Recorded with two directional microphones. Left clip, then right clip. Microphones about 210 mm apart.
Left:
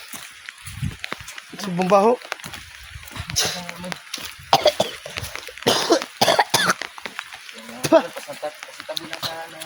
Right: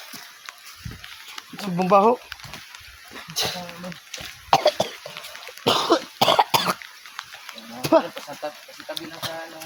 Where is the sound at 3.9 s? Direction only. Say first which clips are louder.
Left 4 dB; 35° left (ahead or behind).